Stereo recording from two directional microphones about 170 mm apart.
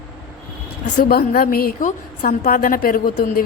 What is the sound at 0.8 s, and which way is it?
A woman's voice, 60° left (ahead or behind).